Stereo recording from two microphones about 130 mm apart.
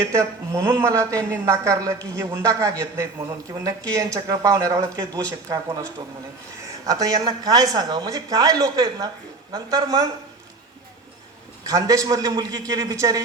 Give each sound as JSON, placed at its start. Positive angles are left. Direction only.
{"t": 0.0, "sound": "speech", "side_deg": -25}
{"t": 11.6, "sound": "speech", "side_deg": -25}